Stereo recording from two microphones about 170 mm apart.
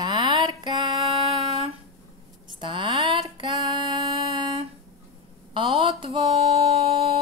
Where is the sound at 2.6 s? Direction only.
30° right (ahead or behind).